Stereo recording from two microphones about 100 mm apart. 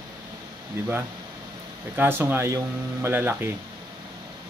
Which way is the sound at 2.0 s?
20° right (ahead or behind).